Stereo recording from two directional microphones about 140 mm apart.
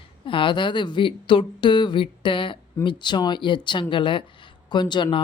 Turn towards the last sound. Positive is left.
turn(degrees=35)  # may be behind; listen again after turning